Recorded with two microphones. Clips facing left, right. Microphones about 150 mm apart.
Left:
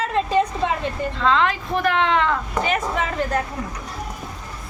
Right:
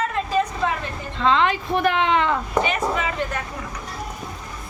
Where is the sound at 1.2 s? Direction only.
Centre (ahead or behind).